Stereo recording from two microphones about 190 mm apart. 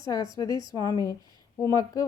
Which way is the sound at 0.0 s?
15° left (ahead or behind).